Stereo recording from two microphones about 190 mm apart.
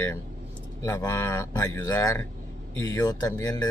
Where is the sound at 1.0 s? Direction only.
15° left (ahead or behind).